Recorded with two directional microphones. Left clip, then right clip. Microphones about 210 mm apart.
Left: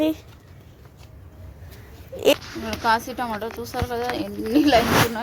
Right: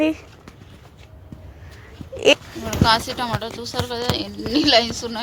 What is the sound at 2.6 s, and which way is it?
Speech, 30° left (ahead or behind).